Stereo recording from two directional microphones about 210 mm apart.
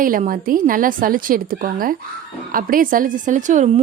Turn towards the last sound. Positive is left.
turn(degrees=-35)  # may be behind; listen again after turning